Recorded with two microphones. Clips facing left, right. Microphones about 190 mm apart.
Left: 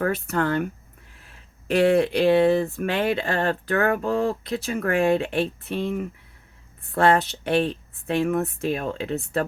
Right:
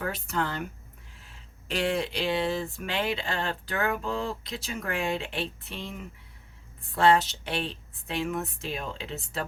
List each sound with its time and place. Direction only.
0.0 s speech: 55° left (ahead or behind)